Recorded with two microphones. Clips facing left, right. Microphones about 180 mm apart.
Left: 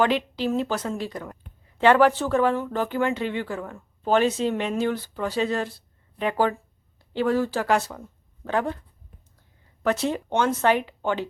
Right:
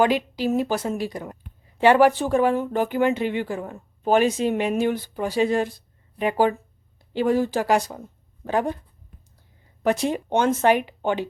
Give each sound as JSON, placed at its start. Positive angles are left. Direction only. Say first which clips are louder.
{"t": 0.0, "sound": "speech", "louder": "right 2 dB", "side_deg": -10}
{"t": 9.8, "sound": "speech", "louder": "right 2 dB", "side_deg": -15}